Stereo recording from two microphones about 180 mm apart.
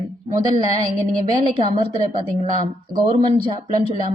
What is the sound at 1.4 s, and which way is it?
Speech, 30° right (ahead or behind).